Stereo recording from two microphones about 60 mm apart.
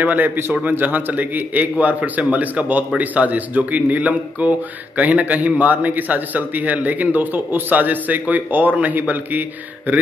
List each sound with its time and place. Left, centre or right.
0.0 s a man's voice: right